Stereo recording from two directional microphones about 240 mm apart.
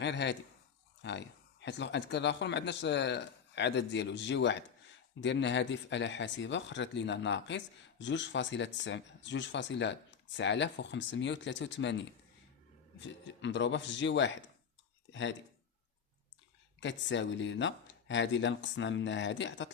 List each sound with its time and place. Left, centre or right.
0.0 s speech: left
16.8 s speech: left